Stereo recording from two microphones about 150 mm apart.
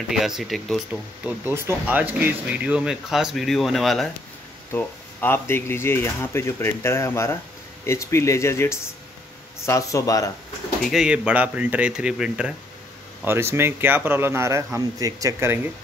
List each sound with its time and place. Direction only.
0.1 s speech: centre (ahead or behind)
1.2 s speech: 15° right (ahead or behind); by 4.1 s centre (ahead or behind)
4.7 s speech: 15° left (ahead or behind)
10.8 s speech: centre (ahead or behind)